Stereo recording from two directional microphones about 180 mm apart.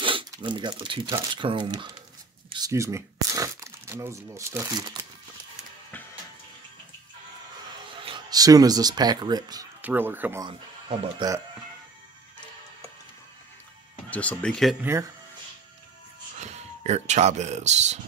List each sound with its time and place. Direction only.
0.0 s speech: 30° right (ahead or behind)
7.9 s speech: 30° right (ahead or behind)
9.8 s speech: 10° right (ahead or behind)
14.1 s speech: 5° left (ahead or behind)
14.8 s speech: 15° right (ahead or behind)
16.3 s speech: 40° right (ahead or behind)